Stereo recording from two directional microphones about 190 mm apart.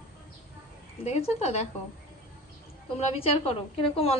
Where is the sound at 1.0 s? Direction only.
35° left (ahead or behind).